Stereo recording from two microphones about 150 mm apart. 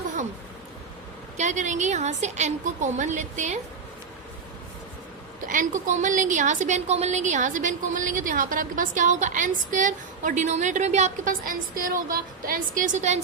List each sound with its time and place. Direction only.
1.4 s a woman's voice: 55° right (ahead or behind)
5.5 s a woman's voice: 60° right (ahead or behind)